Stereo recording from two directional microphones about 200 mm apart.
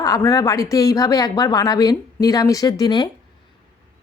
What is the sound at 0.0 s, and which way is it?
A woman's voice, 15° left (ahead or behind).